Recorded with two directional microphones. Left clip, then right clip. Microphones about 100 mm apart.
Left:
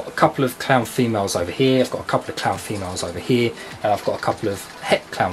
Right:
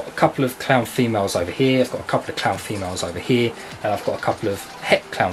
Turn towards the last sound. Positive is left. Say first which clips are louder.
# right 1 dB
turn(degrees=0)  # may be behind; listen again after turning